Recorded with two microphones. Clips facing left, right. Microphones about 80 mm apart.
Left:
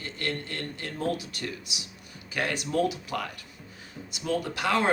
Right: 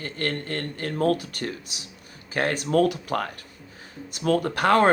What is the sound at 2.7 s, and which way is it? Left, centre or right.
A woman's voice, right.